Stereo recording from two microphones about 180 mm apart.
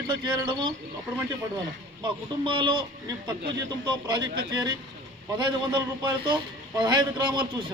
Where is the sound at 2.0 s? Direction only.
25° right (ahead or behind).